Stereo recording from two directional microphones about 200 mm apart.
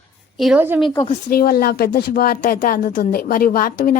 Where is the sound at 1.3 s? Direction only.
50° left (ahead or behind).